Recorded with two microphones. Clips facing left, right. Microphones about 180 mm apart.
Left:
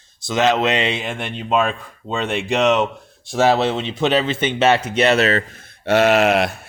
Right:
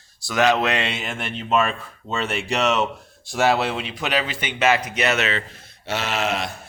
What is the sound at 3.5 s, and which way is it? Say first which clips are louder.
Speech: left 4 dB; 25° left (ahead or behind).